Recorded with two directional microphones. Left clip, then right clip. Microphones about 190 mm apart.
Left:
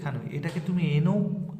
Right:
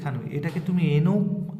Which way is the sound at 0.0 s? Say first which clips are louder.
Right 3 dB; 5° right (ahead or behind).